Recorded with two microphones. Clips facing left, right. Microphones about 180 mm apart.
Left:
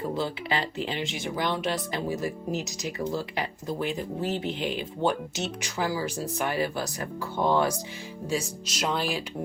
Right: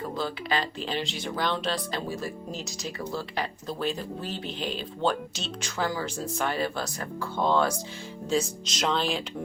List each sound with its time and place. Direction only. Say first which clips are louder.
0.2 s speech: even; 25° left (ahead or behind); by 9.2 s 10° left (ahead or behind)